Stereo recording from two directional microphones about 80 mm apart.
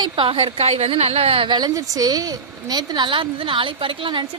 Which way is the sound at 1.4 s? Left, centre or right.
Right.